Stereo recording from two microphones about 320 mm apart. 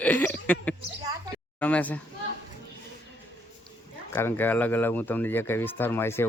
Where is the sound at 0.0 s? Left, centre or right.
Centre.